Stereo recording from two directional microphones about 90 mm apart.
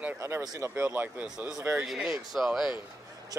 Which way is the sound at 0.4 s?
45° right (ahead or behind).